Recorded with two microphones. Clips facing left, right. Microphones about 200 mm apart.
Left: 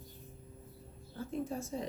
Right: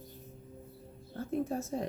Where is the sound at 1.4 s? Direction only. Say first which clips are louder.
Right 4 dB; 55° right (ahead or behind).